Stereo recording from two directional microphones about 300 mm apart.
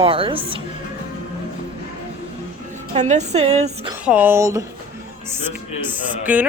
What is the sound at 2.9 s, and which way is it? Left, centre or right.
Speech, right.